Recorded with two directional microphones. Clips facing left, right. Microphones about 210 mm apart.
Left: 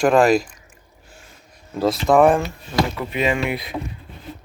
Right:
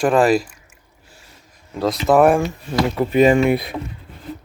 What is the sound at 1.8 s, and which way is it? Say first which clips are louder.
Speech: right 1 dB; centre (ahead or behind).